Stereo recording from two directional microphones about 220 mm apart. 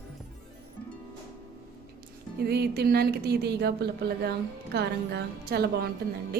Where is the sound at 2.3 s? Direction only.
45° right (ahead or behind).